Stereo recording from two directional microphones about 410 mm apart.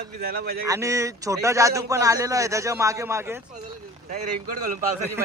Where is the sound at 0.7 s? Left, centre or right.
Centre.